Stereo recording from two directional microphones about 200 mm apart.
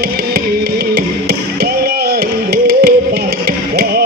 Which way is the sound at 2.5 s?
55° right (ahead or behind).